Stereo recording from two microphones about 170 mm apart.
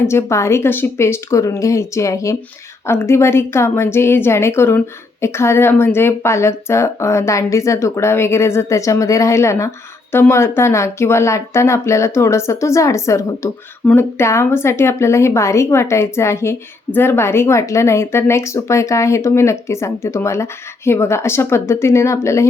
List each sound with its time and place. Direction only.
0.0 s a woman's voice: 15° left (ahead or behind)